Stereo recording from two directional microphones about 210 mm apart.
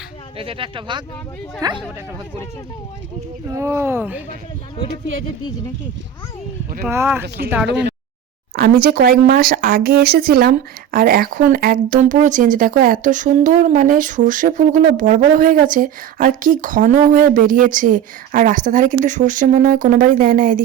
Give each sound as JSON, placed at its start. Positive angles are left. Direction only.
{"t": 0.3, "sound": "speech", "side_deg": -25}
{"t": 3.5, "sound": "speech", "side_deg": -15}
{"t": 6.8, "sound": "speech", "side_deg": -10}
{"t": 8.5, "sound": "speech", "side_deg": -45}